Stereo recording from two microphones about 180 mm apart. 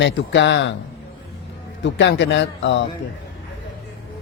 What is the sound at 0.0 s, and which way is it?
Speech, 80° left.